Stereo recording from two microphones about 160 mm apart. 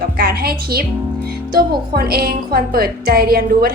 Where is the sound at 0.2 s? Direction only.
70° right (ahead or behind).